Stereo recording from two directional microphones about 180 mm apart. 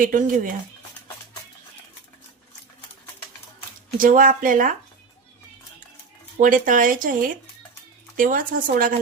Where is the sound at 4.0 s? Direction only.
50° right (ahead or behind).